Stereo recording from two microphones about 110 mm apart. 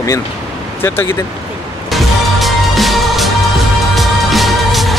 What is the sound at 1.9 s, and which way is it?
Music, centre (ahead or behind).